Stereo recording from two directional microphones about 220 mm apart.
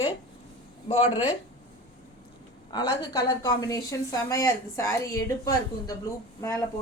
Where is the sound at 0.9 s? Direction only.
25° left (ahead or behind).